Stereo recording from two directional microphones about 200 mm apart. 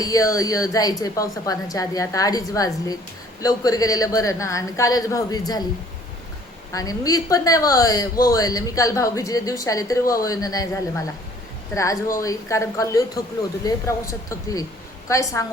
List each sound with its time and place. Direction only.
0.0 s a woman's voice: 15° left (ahead or behind)
6.7 s a woman's voice: 15° left (ahead or behind)